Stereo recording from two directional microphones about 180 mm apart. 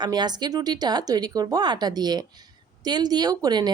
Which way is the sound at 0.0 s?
25° right (ahead or behind).